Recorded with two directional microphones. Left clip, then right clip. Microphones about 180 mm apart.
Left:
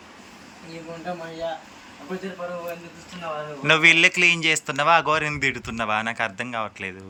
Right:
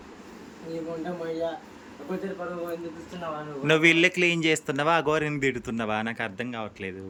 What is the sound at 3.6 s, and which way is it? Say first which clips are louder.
A man's voice: left 5 dB; 15° right (ahead or behind).